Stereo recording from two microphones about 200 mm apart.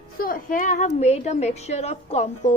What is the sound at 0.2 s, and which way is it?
A woman's voice, 45° left (ahead or behind).